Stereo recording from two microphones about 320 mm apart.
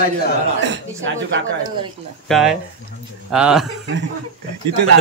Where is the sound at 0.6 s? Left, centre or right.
Right.